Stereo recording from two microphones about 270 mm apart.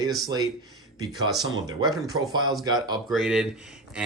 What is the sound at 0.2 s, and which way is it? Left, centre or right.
Speech, centre.